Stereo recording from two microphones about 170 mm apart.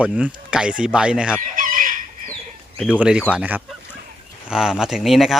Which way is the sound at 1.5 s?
50° right (ahead or behind).